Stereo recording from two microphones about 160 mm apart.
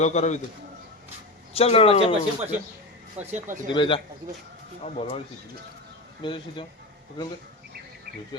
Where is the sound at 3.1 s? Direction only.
45° right (ahead or behind).